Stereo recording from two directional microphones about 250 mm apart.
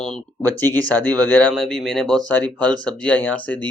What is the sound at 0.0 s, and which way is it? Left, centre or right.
Speech, centre.